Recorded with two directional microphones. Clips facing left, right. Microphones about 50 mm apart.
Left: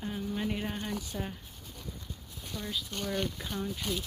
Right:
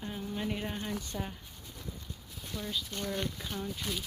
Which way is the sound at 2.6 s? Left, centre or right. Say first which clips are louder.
Even; centre.